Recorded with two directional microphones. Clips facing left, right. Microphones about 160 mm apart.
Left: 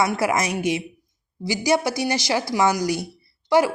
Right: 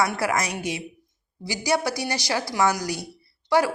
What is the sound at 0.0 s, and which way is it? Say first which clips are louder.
A woman's voice: left 3 dB; 15° left (ahead or behind).